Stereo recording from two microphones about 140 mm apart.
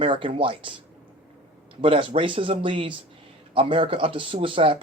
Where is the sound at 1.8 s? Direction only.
40° right (ahead or behind).